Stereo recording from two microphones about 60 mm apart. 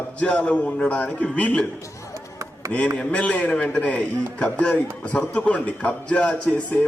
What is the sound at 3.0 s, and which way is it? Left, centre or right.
A man's voice, centre.